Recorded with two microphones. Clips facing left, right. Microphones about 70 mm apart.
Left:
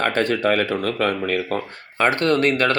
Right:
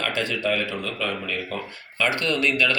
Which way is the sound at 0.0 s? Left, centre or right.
Left.